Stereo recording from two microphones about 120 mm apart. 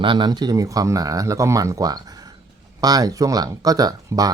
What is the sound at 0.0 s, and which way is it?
Speech, 40° right (ahead or behind).